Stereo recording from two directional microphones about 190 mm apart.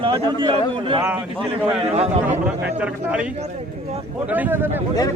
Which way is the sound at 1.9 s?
35° right (ahead or behind).